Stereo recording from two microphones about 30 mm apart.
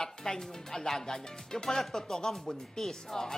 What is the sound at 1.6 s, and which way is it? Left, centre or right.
Speech, centre.